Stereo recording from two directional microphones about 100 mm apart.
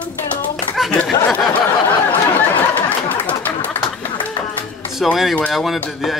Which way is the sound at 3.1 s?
15° left (ahead or behind).